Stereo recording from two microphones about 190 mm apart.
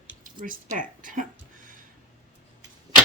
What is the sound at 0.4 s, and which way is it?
Speech, 45° right (ahead or behind).